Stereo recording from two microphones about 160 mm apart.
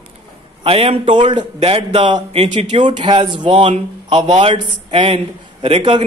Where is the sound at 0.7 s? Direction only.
35° right (ahead or behind).